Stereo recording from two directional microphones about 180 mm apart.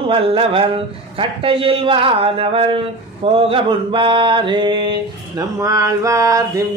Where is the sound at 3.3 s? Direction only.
30° right (ahead or behind).